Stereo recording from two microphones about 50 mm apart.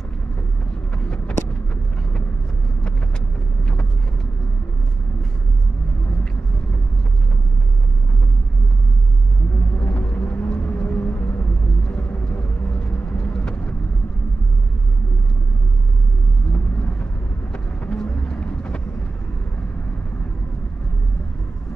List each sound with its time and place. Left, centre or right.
1.0 s vehicle: centre
9.8 s vehicle: left
16.5 s vehicle: left